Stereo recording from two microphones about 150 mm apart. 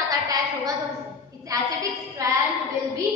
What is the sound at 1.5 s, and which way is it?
Speech, 25° right (ahead or behind).